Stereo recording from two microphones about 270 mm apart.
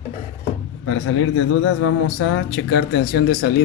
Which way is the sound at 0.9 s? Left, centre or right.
Left.